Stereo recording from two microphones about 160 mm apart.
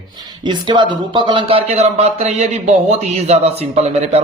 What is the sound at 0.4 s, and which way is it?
A man's voice, 30° right (ahead or behind).